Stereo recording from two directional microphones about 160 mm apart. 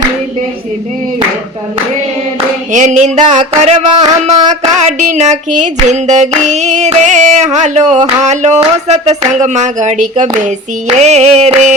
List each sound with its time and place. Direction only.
2.7 s music: 45° right (ahead or behind)